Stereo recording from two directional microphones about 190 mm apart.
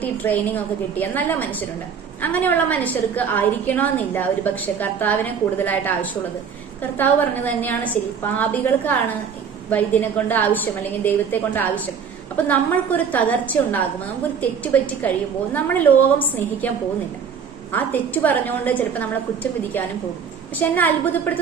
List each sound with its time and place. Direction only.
0.0 s a woman's voice: 10° left (ahead or behind)